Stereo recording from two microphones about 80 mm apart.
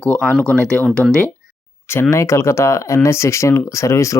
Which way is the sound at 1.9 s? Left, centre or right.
Left.